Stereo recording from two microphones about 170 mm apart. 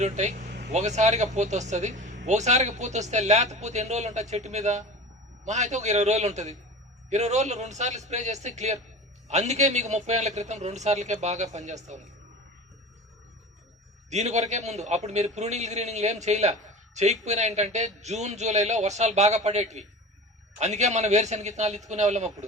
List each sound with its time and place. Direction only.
0.0 s a man's voice: 45° right (ahead or behind)
14.1 s a man's voice: 40° right (ahead or behind)